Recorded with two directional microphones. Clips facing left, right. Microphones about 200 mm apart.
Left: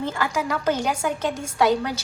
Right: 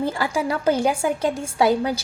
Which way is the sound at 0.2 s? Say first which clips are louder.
Right 2 dB; 30° right (ahead or behind).